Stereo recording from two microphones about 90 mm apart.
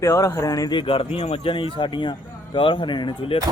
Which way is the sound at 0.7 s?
75° left (ahead or behind).